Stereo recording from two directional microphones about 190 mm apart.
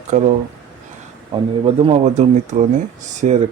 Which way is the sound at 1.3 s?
30° right (ahead or behind).